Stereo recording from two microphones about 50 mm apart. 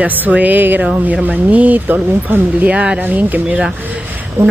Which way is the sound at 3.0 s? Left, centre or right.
Right.